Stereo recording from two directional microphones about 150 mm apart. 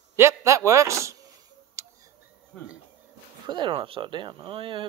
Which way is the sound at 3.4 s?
30° right (ahead or behind).